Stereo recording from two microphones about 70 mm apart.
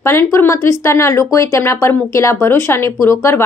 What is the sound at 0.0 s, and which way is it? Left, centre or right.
Speech, left.